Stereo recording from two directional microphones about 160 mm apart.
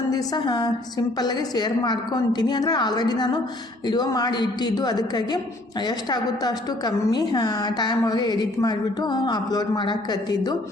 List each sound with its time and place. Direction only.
0.1 s a woman's voice: 25° left (ahead or behind)